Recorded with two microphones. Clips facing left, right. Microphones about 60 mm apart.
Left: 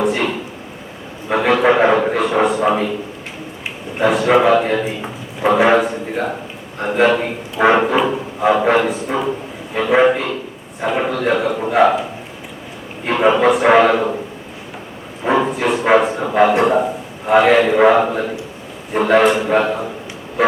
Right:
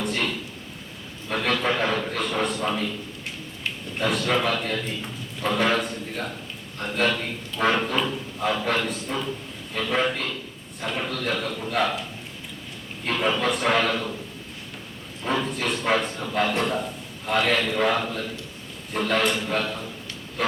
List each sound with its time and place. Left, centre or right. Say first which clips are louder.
0.1 s a sound: left 8 dB; left
2.4 s a sound: left 10 dB; centre
2.6 s a man's voice: left 10 dB; left
4.2 s a man's voice: left 14 dB; left
13.1 s a man's voice: left 11 dB; left
15.2 s a sound: left 10 dB; left
15.4 s bow-wow: left 9 dB; centre
16.1 s a man's voice: left 11 dB; left
17.2 s a man's voice: left 11 dB; centre
19.5 s a man's voice: left 11 dB; left